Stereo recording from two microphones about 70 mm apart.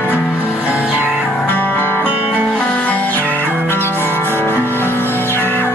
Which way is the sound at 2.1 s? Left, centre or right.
Right.